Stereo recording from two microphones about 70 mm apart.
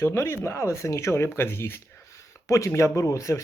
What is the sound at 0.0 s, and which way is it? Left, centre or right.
Speech, left.